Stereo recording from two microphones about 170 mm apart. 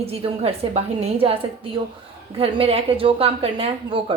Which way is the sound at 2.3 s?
30° right (ahead or behind).